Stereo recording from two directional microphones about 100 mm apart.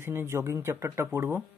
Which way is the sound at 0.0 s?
25° right (ahead or behind).